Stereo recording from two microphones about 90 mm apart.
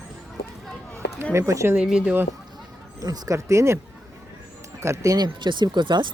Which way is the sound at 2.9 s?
45° right (ahead or behind).